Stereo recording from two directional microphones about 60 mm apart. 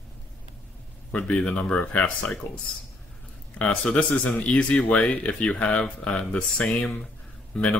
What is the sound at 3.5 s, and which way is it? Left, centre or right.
Speech, centre.